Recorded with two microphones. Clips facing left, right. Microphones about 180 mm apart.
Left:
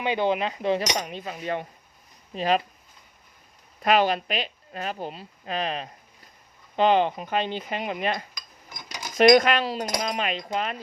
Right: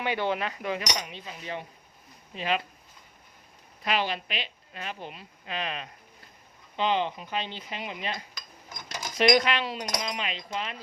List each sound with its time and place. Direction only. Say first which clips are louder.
0.0 s cutlery: left 4 dB; 20° left (ahead or behind)
0.9 s speech: left 6 dB; 45° left (ahead or behind)
2.3 s a woman's voice: left 6 dB; 40° left (ahead or behind)
3.8 s a woman's voice: left 8 dB; 45° left (ahead or behind)
6.7 s speech: left 7 dB; 50° left (ahead or behind); by 10.0 s 30° left (ahead or behind)
10.0 s speech: left 6 dB; 50° left (ahead or behind)